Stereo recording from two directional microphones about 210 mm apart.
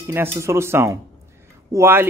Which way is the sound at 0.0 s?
10° right (ahead or behind).